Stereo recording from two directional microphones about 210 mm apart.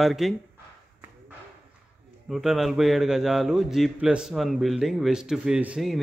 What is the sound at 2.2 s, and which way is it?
A man's voice, centre (ahead or behind).